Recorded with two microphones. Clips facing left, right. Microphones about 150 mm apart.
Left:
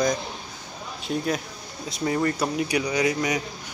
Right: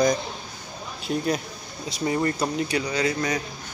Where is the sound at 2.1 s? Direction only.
10° right (ahead or behind).